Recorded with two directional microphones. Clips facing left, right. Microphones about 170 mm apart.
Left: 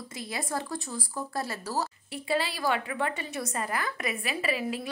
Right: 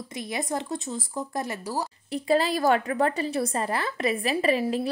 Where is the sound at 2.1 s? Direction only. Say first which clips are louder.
Right 8 dB; 40° right (ahead or behind).